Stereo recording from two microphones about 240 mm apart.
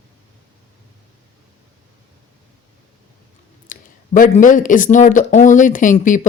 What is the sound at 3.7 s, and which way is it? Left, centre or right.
Speech, left.